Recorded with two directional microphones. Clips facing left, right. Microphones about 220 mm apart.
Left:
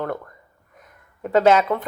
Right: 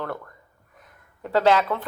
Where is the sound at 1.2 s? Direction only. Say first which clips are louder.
Left 4 dB; 20° left (ahead or behind).